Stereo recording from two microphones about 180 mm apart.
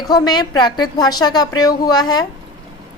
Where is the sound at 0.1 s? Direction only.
20° left (ahead or behind).